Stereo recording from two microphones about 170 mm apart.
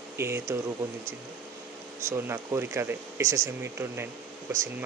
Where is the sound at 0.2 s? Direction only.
15° right (ahead or behind).